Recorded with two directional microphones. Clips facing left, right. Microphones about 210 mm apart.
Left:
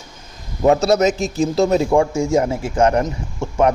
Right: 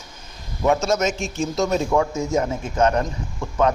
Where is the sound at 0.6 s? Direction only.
35° left (ahead or behind).